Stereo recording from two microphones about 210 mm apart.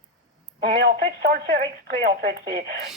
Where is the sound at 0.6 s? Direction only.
45° right (ahead or behind).